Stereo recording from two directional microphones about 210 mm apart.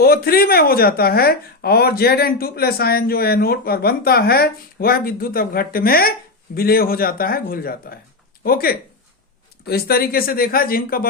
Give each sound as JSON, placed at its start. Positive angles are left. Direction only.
{"t": 0.0, "sound": "a woman's voice", "side_deg": 45}